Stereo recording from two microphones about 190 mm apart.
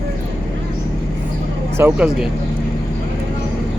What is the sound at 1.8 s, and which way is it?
Speech, 10° right (ahead or behind).